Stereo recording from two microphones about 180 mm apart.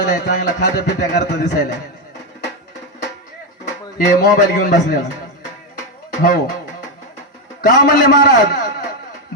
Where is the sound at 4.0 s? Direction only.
50° left (ahead or behind).